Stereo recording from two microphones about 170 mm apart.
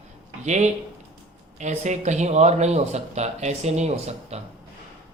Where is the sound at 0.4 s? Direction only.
45° right (ahead or behind).